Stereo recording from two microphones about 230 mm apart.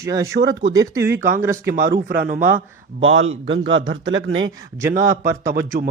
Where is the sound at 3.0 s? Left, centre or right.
Right.